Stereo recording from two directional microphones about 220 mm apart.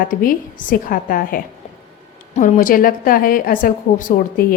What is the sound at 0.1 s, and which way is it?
A woman's voice, 40° left (ahead or behind).